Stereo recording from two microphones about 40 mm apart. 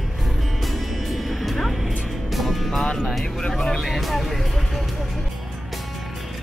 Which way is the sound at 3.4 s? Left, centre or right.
Centre.